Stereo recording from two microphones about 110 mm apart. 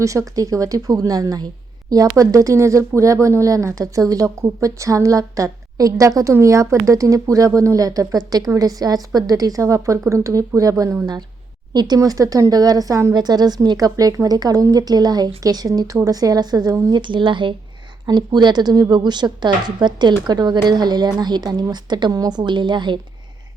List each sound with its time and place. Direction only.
0.0 s a woman's voice: 30° right (ahead or behind); by 23.0 s 45° right (ahead or behind)